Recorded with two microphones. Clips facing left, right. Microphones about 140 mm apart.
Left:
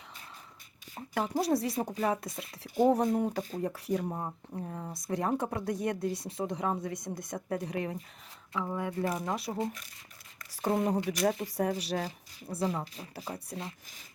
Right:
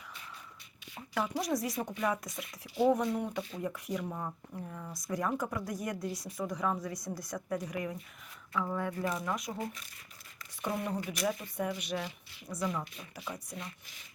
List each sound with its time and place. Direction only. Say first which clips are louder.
0.9 s speech: left 3 dB; 40° left (ahead or behind)
2.6 s speech: left 3 dB; 45° left (ahead or behind)
8.6 s speech: left 3 dB; 20° left (ahead or behind)